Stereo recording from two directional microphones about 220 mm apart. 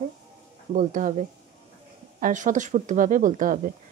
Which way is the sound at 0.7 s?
35° right (ahead or behind).